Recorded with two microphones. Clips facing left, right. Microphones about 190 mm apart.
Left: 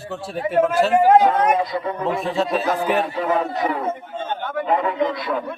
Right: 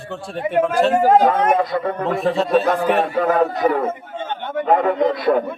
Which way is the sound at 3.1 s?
55° right (ahead or behind).